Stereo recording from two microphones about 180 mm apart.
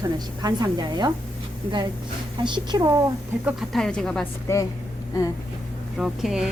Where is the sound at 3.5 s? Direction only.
Centre (ahead or behind).